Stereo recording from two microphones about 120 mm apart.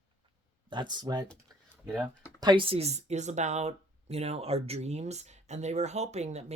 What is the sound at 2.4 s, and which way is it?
Speech, 45° right (ahead or behind).